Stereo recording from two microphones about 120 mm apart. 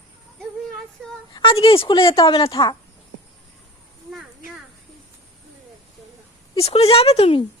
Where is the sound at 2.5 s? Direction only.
35° left (ahead or behind).